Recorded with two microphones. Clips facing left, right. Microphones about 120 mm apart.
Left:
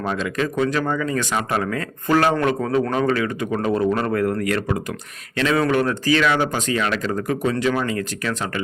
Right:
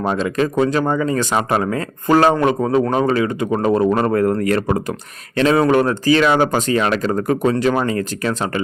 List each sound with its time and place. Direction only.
0.0 s a man's voice: 35° right (ahead or behind)